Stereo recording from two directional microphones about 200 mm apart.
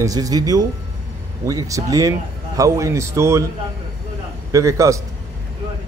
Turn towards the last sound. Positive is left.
turn(degrees=-15)  # may be behind; listen again after turning